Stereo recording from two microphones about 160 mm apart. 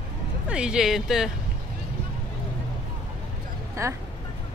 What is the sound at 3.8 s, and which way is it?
Speech, 20° right (ahead or behind).